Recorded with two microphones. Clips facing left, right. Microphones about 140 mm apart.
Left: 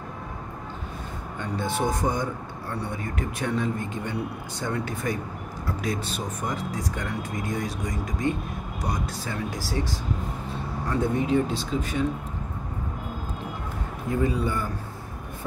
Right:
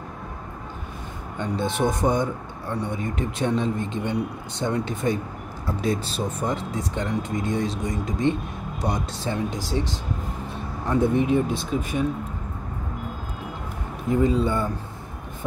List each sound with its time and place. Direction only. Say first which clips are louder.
1.4 s speech: right 3 dB; 20° right (ahead or behind)
14.0 s speech: right 5 dB; 25° right (ahead or behind)